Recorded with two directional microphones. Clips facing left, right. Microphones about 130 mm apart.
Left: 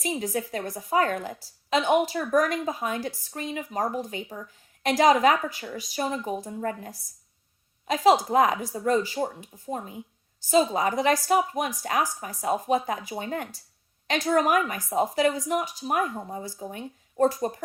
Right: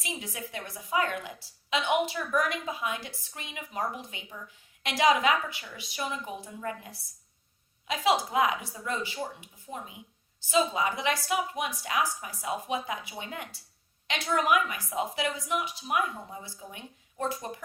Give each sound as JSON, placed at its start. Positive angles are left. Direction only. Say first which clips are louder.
{"t": 0.0, "sound": "a woman's voice", "louder": "left 10 dB", "side_deg": 40}